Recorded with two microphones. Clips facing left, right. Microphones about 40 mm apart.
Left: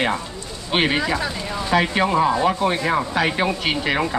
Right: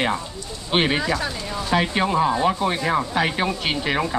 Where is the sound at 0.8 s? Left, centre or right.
Centre.